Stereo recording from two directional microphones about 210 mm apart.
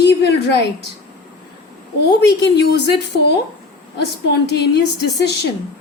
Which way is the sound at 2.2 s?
55° left (ahead or behind).